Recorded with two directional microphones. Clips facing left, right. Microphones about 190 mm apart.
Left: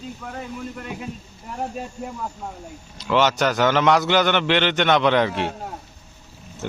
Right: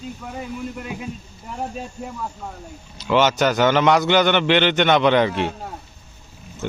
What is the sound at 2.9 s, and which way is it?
A man's voice, centre (ahead or behind).